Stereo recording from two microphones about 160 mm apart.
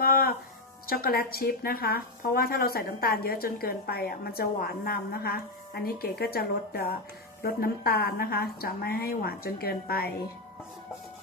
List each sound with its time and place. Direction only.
0.0 s music: 65° left (ahead or behind)
0.8 s speech: 70° left (ahead or behind)